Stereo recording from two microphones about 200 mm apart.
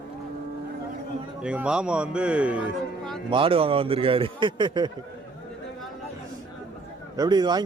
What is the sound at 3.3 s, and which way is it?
A man's voice, 25° right (ahead or behind).